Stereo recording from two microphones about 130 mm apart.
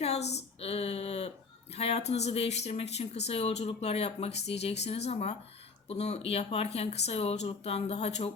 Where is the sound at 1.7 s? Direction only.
55° left (ahead or behind).